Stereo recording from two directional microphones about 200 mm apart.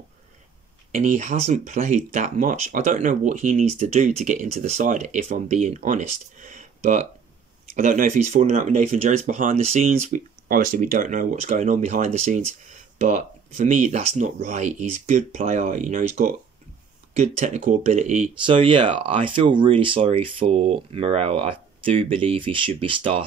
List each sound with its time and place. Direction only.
0.9 s speech: 40° right (ahead or behind)
18.4 s speech: 25° right (ahead or behind)